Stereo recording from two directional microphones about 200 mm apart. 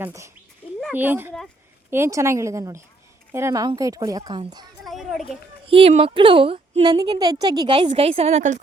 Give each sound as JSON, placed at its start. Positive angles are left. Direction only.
{"t": 0.0, "sound": "speech", "side_deg": -15}
{"t": 4.8, "sound": "a sound", "side_deg": 0}
{"t": 5.6, "sound": "a woman's voice", "side_deg": -30}